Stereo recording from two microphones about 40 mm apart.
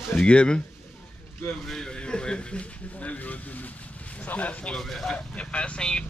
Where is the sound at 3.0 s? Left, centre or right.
Left.